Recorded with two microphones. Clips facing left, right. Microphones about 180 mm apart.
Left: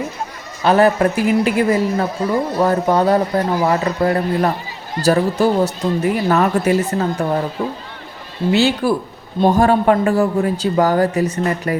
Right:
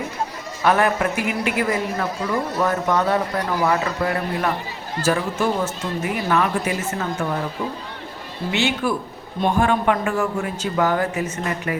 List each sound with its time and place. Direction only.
0.6 s a man's voice: 30° left (ahead or behind)
8.5 s a man's voice: 35° left (ahead or behind)